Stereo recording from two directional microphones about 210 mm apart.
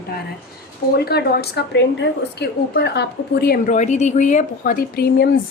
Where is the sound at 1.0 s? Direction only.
50° left (ahead or behind).